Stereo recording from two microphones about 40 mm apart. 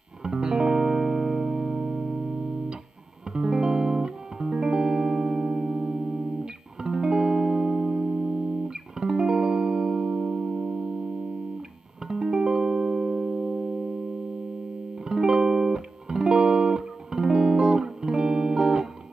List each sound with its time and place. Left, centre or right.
0.2 s music: centre
12.1 s music: centre
15.0 s music: centre